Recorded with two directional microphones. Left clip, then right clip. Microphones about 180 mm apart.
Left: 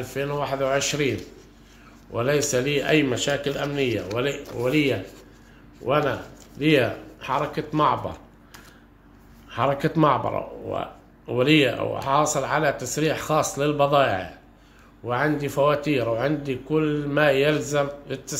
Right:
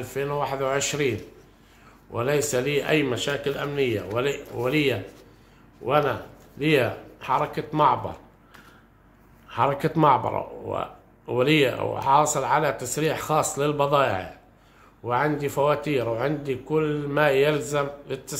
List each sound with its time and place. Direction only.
0.0 s speech: 15° right (ahead or behind)
2.1 s speech: 10° right (ahead or behind)
9.5 s speech: 15° right (ahead or behind)